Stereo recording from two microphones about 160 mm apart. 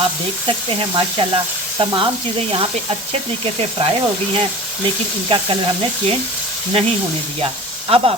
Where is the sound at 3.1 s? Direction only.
35° right (ahead or behind).